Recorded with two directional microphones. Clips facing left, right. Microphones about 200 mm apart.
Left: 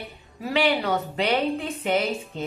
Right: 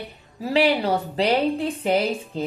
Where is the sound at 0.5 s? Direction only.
30° right (ahead or behind).